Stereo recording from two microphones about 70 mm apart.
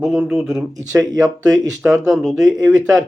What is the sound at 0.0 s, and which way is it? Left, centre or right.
Speech, centre.